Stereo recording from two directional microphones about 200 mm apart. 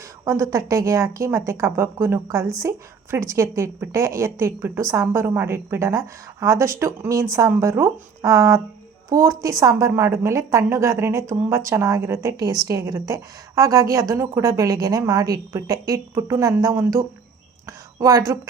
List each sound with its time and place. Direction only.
0.3 s a woman's voice: 15° right (ahead or behind)